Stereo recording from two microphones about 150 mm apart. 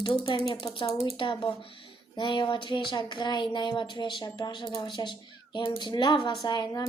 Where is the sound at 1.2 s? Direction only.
35° left (ahead or behind).